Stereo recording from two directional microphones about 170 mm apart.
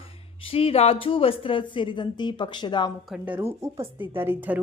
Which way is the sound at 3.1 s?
10° right (ahead or behind).